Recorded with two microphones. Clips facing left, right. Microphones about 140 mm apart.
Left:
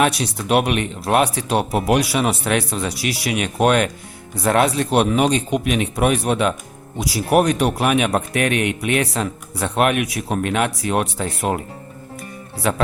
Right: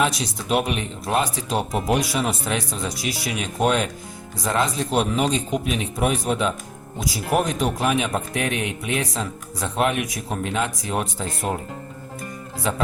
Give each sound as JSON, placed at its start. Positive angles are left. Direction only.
{"t": 0.0, "sound": "a man's voice", "side_deg": 65}
{"t": 12.7, "sound": "a man's voice", "side_deg": 70}